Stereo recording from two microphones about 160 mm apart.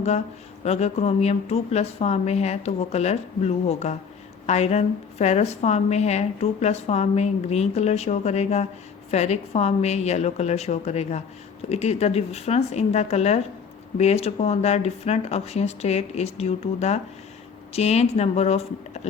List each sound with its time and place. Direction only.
0.6 s a woman's voice: 45° left (ahead or behind)